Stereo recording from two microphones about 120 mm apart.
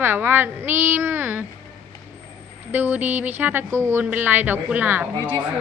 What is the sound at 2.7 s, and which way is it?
A woman's voice, 15° right (ahead or behind).